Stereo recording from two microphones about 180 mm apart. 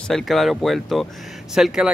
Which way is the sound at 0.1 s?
Centre (ahead or behind).